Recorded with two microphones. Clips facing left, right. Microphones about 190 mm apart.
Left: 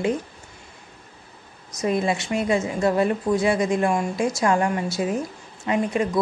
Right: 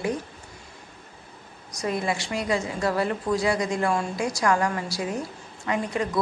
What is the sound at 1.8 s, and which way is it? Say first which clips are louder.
A woman's voice: left 4 dB; 20° left (ahead or behind).